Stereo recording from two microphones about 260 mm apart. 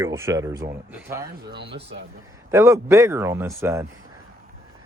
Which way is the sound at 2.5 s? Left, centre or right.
Centre.